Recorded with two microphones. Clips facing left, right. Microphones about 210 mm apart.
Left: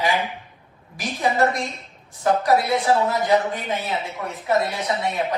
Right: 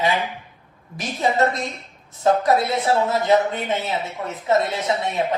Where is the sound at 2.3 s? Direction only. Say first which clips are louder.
Right 2 dB; 25° right (ahead or behind).